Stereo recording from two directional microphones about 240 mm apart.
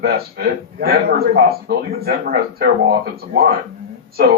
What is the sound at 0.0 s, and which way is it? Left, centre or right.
A man's voice, right.